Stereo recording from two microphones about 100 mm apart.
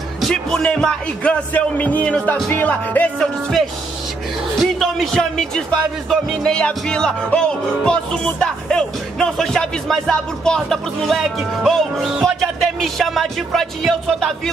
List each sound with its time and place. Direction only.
0.2 s speech: 5° left (ahead or behind)
4.7 s speech: centre (ahead or behind)